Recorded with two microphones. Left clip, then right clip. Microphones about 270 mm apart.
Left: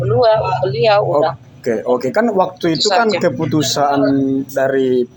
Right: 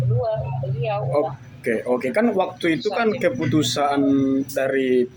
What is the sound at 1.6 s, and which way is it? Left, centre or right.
Speech, centre.